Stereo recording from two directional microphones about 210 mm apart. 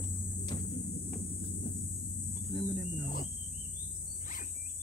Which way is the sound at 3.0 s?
45° left (ahead or behind).